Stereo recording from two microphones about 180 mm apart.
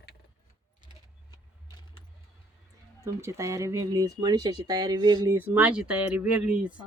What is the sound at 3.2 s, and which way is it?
Speech, 15° right (ahead or behind).